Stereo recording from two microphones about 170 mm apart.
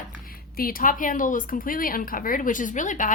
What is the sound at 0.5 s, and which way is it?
Speech, 60° left (ahead or behind).